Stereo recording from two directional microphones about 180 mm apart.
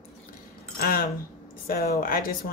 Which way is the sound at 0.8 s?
55° left (ahead or behind).